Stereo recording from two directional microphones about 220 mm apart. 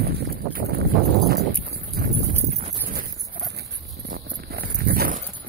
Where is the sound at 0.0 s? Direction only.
40° right (ahead or behind).